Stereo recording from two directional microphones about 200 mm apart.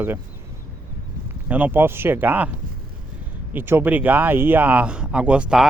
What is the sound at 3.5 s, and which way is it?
Speech, 10° right (ahead or behind).